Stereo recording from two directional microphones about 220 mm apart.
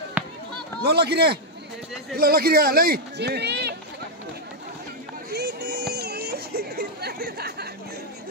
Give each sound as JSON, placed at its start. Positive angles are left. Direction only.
{"t": 0.2, "sound": "chop", "side_deg": -10}
{"t": 0.8, "sound": "a man's voice", "side_deg": -45}
{"t": 5.3, "sound": "music", "side_deg": -50}